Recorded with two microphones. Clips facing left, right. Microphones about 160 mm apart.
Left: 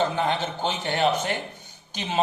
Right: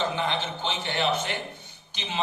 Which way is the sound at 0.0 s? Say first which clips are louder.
Left 4 dB; 45° left (ahead or behind).